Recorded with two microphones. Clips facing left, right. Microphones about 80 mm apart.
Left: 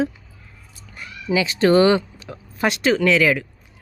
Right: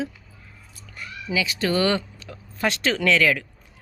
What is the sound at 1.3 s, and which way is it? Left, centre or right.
Speech, left.